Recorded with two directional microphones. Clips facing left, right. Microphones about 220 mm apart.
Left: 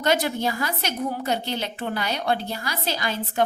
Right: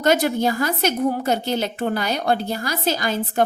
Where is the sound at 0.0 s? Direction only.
45° right (ahead or behind).